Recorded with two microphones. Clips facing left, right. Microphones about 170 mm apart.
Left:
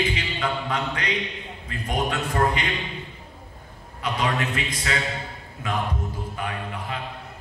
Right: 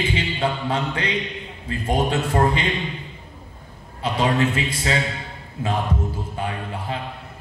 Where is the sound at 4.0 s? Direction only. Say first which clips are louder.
Right 5 dB; 30° right (ahead or behind).